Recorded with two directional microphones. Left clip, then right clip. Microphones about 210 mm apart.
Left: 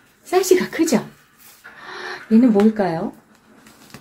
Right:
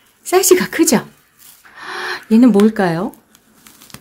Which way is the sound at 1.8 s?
45° right (ahead or behind).